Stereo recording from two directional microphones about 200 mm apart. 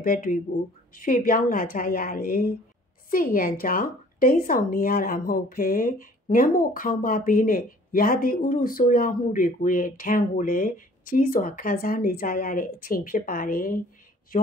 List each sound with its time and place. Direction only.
0.0 s a woman's voice: 45° left (ahead or behind)